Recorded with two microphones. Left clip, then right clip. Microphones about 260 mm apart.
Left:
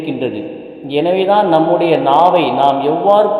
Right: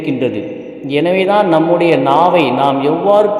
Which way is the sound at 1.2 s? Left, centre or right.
Right.